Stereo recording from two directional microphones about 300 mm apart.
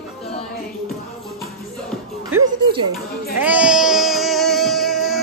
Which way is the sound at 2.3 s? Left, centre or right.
Centre.